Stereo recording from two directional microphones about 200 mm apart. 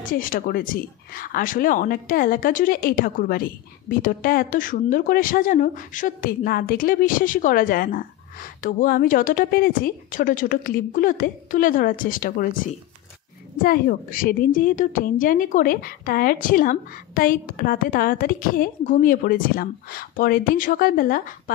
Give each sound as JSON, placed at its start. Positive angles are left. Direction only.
{"t": 0.0, "sound": "speech", "side_deg": 45}
{"t": 13.6, "sound": "speech", "side_deg": 45}